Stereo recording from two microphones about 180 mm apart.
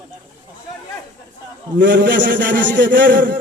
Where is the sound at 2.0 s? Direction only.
75° right (ahead or behind).